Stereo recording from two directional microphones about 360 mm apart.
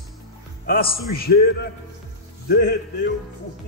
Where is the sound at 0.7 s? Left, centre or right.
Left.